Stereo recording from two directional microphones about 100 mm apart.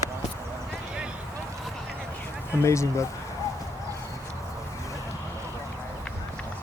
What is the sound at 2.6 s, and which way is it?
Speech, 30° left (ahead or behind).